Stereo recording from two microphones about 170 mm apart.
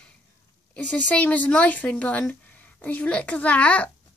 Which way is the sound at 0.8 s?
10° left (ahead or behind).